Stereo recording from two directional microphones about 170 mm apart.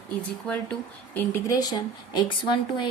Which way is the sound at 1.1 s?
15° left (ahead or behind).